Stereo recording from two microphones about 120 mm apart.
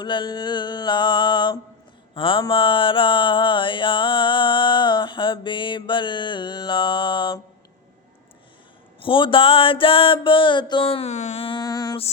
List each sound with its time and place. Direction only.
0.0 s mantra: 40° left (ahead or behind)
9.0 s mantra: 45° left (ahead or behind)
11.1 s a sound: 65° left (ahead or behind)
11.4 s mantra: 35° left (ahead or behind)